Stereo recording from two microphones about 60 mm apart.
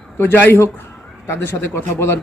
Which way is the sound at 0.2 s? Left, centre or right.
Left.